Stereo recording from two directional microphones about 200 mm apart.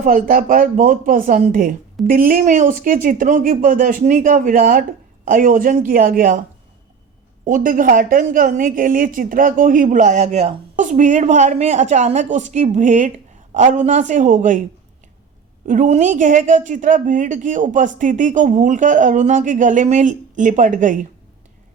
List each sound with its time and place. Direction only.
0.0 s speech: 45° right (ahead or behind)
7.4 s a woman's voice: 40° right (ahead or behind)
15.6 s a woman's voice: 40° right (ahead or behind)